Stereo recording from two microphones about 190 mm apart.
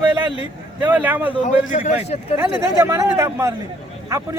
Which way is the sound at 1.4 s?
40° left (ahead or behind).